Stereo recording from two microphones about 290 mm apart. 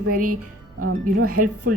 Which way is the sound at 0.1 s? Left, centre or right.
Right.